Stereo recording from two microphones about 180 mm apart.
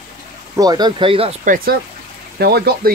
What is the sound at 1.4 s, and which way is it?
Speech, 45° right (ahead or behind).